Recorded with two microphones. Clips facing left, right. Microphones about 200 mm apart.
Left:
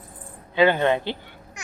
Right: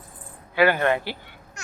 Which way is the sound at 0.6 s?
20° left (ahead or behind).